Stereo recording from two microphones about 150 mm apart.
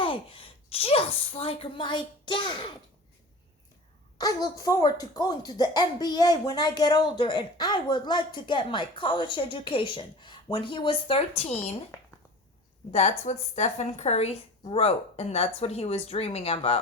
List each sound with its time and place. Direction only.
0.0 s speech: 35° left (ahead or behind)
4.5 s speech: 20° left (ahead or behind); by 11.6 s 40° left (ahead or behind)
12.9 s a woman's voice: 50° left (ahead or behind)